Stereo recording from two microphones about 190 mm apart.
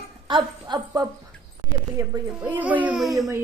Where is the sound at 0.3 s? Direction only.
25° right (ahead or behind); by 3.2 s centre (ahead or behind).